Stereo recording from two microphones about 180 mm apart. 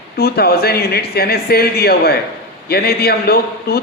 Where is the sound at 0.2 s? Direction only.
60° left (ahead or behind).